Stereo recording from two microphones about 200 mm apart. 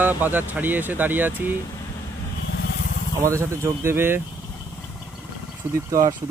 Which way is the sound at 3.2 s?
15° right (ahead or behind).